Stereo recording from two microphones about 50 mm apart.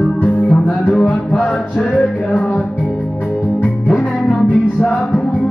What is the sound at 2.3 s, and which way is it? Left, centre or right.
Music, left.